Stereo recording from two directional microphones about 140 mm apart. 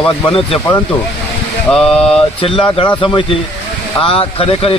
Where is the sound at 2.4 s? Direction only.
40° left (ahead or behind).